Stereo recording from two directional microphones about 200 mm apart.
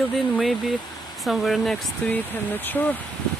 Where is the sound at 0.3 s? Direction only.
Centre (ahead or behind).